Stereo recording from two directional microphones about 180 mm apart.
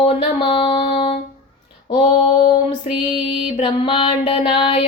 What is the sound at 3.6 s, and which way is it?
Music, 30° left (ahead or behind).